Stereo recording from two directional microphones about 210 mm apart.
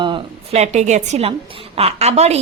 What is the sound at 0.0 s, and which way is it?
A woman's voice, 25° right (ahead or behind).